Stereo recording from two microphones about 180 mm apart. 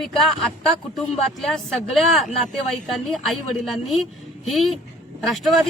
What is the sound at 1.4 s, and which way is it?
Speech, centre (ahead or behind).